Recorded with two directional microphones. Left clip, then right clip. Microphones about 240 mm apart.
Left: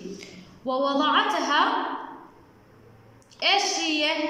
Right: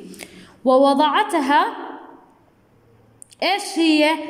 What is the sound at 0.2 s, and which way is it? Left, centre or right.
A woman's voice, right.